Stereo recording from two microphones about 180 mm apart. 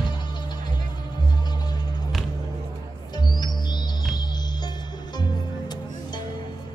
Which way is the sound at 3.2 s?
25° left (ahead or behind).